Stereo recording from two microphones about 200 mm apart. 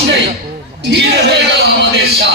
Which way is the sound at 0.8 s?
60° right (ahead or behind).